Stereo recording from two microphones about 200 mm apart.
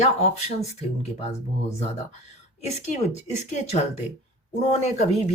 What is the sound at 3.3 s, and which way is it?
Speech, 35° left (ahead or behind).